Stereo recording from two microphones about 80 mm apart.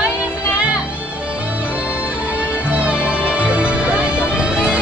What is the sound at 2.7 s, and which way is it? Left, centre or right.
Music, centre.